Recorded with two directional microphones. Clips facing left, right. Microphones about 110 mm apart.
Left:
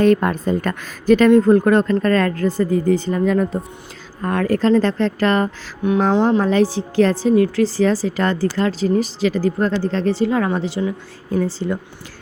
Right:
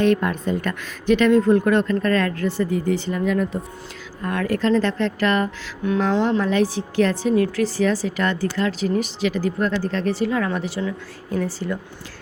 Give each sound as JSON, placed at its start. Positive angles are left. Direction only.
{"t": 0.0, "sound": "a woman's voice", "side_deg": 40}